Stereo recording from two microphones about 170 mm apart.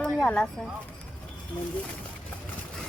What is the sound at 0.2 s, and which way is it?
Speech, 10° left (ahead or behind).